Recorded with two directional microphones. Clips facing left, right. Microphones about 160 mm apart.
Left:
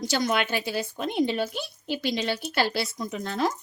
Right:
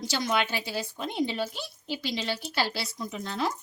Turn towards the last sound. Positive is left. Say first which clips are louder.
# left 4 dB
turn(degrees=55)  # may be behind; listen again after turning